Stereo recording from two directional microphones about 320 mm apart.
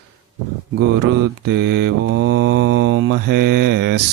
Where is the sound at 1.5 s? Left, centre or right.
Right.